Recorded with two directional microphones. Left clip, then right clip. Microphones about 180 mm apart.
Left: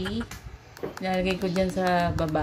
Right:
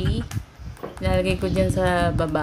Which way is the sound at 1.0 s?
15° right (ahead or behind).